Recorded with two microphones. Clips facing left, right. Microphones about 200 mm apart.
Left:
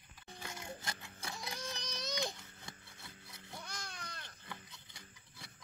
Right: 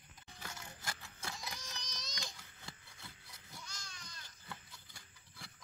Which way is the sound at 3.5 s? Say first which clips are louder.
Left 6 dB; 60° left (ahead or behind).